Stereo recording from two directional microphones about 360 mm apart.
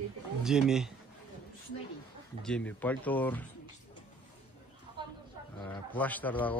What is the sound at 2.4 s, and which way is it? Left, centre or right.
A man's voice, centre.